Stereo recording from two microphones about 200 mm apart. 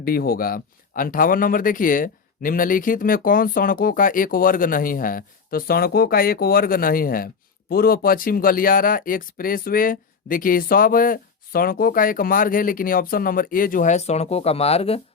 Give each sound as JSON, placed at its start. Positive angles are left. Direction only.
{"t": 0.0, "sound": "speech", "side_deg": 50}